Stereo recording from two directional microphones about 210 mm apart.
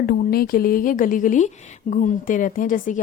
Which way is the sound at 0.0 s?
45° left (ahead or behind).